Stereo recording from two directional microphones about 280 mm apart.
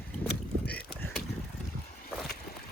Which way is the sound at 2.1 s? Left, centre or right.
Centre.